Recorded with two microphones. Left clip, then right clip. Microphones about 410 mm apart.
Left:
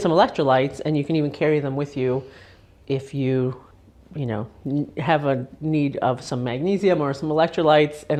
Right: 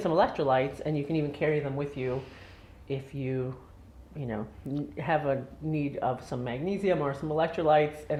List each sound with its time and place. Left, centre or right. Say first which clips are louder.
0.0 s speech: left 7 dB; left